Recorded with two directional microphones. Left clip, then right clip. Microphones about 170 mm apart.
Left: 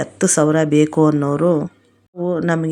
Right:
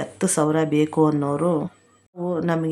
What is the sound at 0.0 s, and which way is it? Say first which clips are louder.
Speech: left 6 dB; 20° left (ahead or behind).